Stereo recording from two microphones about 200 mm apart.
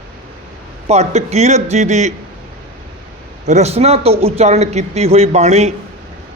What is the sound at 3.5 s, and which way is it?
A man's voice, 35° right (ahead or behind).